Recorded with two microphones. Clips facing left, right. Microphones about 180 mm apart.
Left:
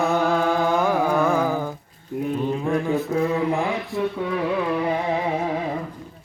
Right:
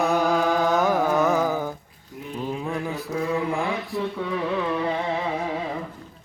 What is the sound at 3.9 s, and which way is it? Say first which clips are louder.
Carnatic music: left 4 dB; centre (ahead or behind).